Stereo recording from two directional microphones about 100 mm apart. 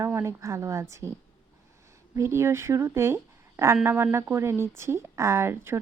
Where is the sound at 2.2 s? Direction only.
25° right (ahead or behind).